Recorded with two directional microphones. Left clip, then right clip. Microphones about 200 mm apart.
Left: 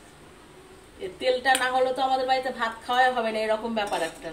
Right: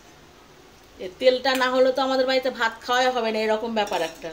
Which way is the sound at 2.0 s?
50° right (ahead or behind).